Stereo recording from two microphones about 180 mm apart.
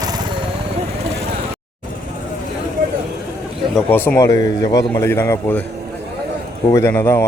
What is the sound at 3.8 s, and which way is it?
Speech, 10° left (ahead or behind).